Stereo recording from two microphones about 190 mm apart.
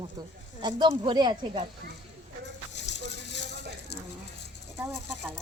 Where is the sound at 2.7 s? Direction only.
65° left (ahead or behind).